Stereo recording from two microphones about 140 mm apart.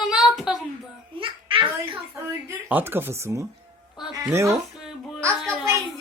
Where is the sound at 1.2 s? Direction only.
40° right (ahead or behind).